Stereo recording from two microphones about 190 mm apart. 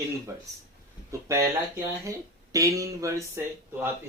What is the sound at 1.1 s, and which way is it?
Speech, 15° right (ahead or behind).